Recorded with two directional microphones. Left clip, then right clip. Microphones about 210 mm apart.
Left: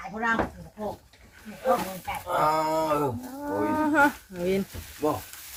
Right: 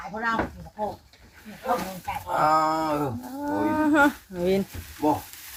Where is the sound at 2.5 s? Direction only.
50° left (ahead or behind).